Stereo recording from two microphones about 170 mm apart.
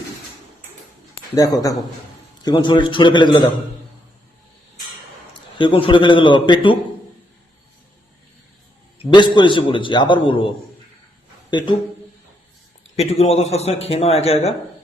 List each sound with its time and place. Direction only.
1.4 s a man's voice: 20° left (ahead or behind)
5.5 s a man's voice: 30° left (ahead or behind)
9.0 s a man's voice: 30° left (ahead or behind)
11.5 s a man's voice: 25° left (ahead or behind)
13.0 s a man's voice: 40° left (ahead or behind)